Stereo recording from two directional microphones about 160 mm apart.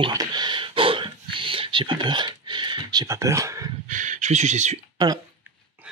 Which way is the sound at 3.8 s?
50° right (ahead or behind).